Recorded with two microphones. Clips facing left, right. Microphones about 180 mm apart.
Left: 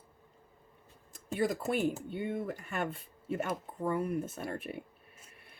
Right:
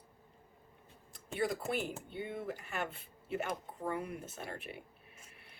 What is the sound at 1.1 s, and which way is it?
Speech, 45° left (ahead or behind).